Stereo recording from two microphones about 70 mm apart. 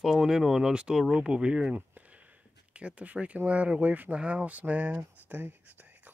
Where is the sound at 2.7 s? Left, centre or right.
Centre.